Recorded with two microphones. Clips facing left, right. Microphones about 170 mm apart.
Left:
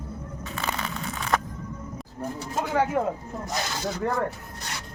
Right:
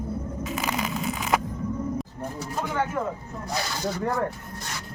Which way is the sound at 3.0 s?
30° left (ahead or behind).